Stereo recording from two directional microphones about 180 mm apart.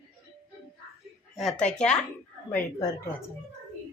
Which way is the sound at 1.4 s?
Centre (ahead or behind).